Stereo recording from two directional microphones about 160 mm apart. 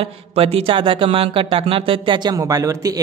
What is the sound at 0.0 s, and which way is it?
Speech, 40° right (ahead or behind).